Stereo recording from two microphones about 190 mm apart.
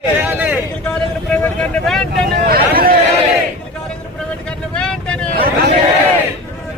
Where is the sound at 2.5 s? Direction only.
50° right (ahead or behind).